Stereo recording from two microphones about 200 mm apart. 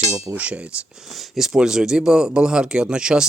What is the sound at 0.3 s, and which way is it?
Speech, 5° right (ahead or behind).